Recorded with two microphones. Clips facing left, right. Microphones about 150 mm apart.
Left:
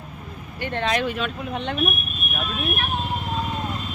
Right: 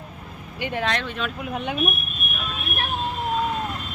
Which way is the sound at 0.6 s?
10° right (ahead or behind).